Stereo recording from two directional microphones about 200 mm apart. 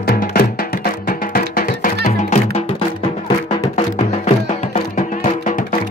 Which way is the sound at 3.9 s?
35° left (ahead or behind).